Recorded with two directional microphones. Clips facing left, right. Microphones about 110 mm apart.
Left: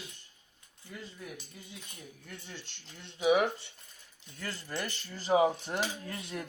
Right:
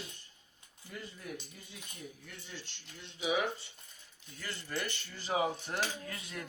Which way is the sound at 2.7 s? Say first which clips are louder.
Left 2 dB; 50° left (ahead or behind).